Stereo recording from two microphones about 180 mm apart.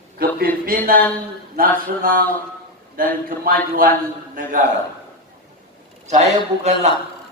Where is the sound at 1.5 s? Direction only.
50° right (ahead or behind).